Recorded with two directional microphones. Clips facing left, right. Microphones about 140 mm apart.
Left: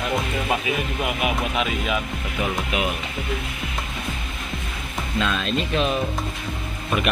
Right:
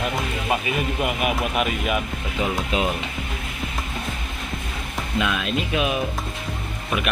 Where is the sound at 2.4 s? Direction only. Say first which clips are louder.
Right 2 dB; 30° right (ahead or behind).